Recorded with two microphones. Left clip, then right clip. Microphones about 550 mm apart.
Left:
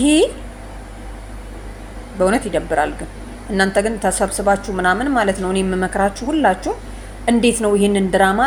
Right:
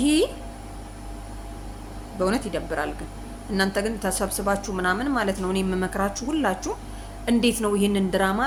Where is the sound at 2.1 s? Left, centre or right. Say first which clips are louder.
Left 8 dB; right.